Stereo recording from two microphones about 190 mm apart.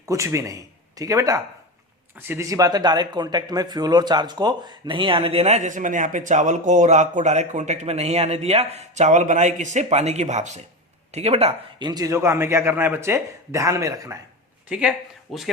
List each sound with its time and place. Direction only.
0.0 s a man's voice: 15° right (ahead or behind)
14.7 s speech: 5° right (ahead or behind)